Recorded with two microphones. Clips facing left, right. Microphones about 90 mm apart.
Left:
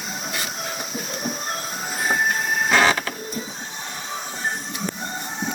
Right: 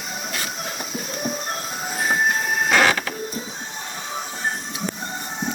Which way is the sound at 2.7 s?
25° left (ahead or behind).